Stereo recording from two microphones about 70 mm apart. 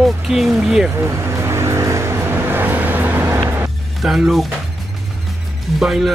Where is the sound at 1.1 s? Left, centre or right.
Right.